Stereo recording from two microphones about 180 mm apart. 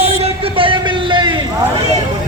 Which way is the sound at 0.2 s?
30° right (ahead or behind).